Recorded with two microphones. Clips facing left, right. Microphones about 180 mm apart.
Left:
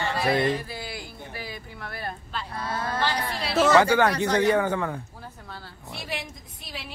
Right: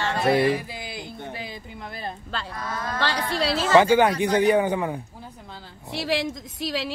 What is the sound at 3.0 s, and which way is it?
Speech, 90° right.